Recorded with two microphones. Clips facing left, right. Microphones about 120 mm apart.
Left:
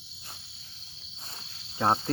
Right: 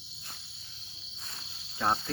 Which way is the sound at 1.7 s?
30° left (ahead or behind).